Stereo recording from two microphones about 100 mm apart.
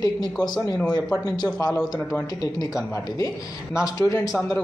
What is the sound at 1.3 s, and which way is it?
Speech, 45° left (ahead or behind).